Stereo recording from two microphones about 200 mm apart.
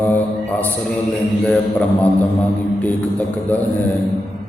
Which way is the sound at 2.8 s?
10° left (ahead or behind).